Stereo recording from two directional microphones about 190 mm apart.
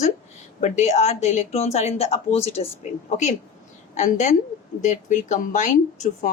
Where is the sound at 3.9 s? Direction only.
40° left (ahead or behind).